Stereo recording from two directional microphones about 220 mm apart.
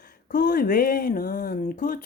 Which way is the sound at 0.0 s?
40° left (ahead or behind).